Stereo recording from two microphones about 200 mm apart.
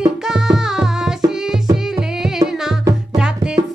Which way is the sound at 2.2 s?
Centre (ahead or behind).